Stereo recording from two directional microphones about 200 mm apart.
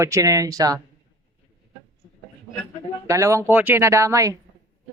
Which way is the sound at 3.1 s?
15° right (ahead or behind).